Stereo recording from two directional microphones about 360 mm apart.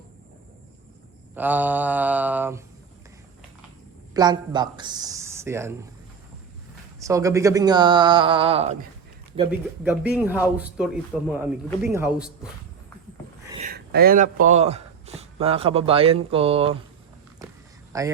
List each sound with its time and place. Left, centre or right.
1.4 s mantra: centre
4.1 s speech: centre
7.0 s speech: centre
9.3 s mantra: centre
13.5 s a sound: right
14.4 s speech: centre
17.9 s speech: centre